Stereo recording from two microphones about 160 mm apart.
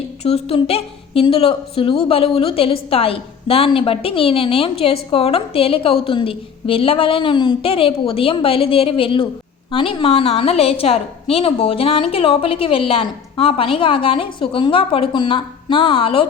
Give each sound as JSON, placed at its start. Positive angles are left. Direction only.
{"t": 0.2, "sound": "a woman's voice", "side_deg": 40}